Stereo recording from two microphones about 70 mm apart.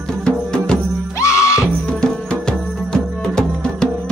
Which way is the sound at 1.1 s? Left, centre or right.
Left.